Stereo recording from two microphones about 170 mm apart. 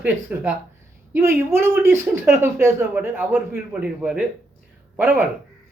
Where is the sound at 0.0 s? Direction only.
10° right (ahead or behind).